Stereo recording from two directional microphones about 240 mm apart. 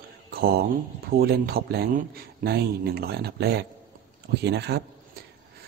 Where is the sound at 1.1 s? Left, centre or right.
Right.